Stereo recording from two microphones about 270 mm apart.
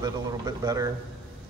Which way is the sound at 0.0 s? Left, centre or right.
Centre.